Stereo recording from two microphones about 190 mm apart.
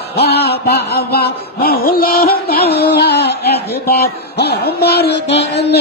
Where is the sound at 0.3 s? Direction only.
60° left (ahead or behind).